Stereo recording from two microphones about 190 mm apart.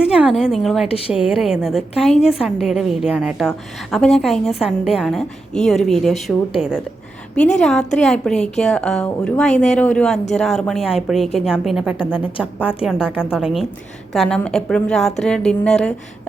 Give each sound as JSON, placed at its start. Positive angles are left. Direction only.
{"t": 0.0, "sound": "a woman's voice", "side_deg": -5}
{"t": 0.9, "sound": "speech", "side_deg": 30}
{"t": 1.4, "sound": "a woman's voice", "side_deg": 0}